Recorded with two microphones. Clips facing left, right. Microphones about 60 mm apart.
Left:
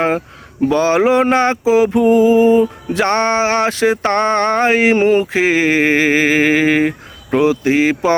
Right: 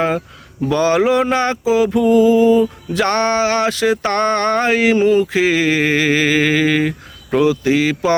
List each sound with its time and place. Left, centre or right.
0.7 s music: left
5.2 s music: left